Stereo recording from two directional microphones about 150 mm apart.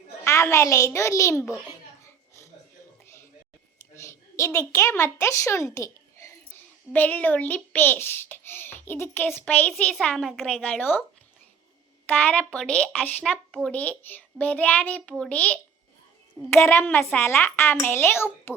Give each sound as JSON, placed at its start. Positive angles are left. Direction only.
{"t": 0.3, "sound": "a child's voice", "side_deg": 20}
{"t": 3.9, "sound": "a child's voice", "side_deg": 20}
{"t": 12.0, "sound": "a child's voice", "side_deg": 10}